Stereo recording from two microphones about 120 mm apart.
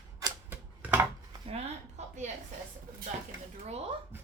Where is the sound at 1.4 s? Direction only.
65° right (ahead or behind).